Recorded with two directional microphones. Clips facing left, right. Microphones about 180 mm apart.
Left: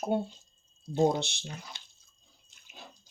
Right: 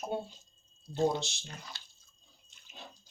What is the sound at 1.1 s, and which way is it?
Speech, 60° left (ahead or behind).